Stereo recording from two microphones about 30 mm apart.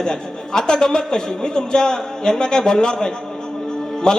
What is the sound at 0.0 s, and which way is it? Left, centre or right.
A man's voice, left.